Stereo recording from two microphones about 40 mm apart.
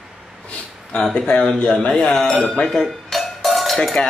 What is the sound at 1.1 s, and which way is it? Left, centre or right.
Mantra, left.